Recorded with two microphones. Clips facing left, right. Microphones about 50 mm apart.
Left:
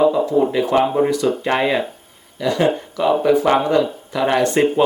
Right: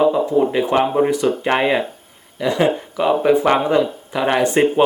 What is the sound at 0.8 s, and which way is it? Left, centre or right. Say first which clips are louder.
Speech: even; centre.